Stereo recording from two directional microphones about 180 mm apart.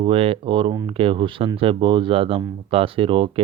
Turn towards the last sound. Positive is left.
turn(degrees=-30)  # may be behind; listen again after turning